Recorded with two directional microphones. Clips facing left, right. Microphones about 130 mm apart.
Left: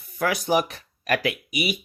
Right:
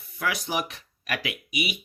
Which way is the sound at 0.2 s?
45° left (ahead or behind).